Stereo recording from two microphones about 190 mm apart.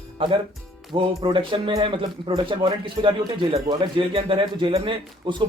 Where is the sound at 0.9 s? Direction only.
25° right (ahead or behind).